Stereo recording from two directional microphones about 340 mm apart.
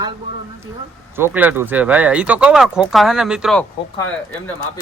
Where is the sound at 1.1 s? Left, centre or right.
Centre.